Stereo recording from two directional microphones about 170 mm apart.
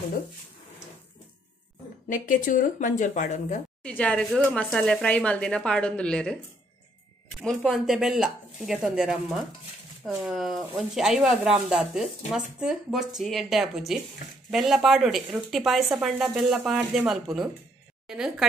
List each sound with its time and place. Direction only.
2.0 s speech: 50° left (ahead or behind)
3.8 s speech: 5° left (ahead or behind)
7.4 s a woman's voice: centre (ahead or behind)